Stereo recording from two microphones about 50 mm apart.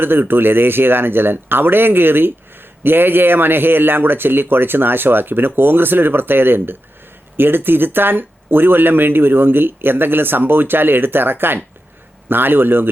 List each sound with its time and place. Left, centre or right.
0.0 s speech: right